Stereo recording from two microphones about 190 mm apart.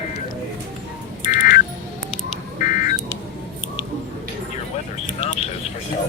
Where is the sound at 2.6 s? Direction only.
40° left (ahead or behind).